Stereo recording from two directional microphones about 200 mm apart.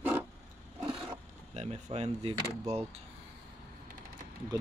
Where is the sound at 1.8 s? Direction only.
30° right (ahead or behind).